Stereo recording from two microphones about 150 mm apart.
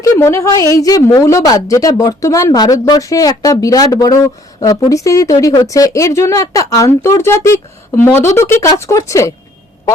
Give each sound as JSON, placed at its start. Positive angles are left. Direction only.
{"t": 0.0, "sound": "a woman's voice", "side_deg": 20}